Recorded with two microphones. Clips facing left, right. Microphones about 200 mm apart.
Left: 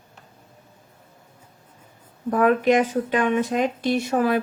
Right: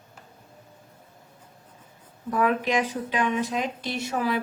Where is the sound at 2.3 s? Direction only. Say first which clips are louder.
Left 6 dB; 50° left (ahead or behind).